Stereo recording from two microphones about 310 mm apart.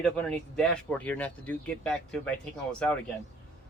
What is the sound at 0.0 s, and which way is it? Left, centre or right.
Speech, centre.